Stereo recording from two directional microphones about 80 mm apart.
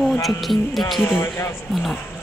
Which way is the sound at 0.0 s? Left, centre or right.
Centre.